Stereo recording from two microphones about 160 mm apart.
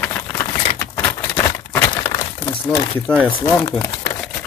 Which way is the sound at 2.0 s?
30° left (ahead or behind).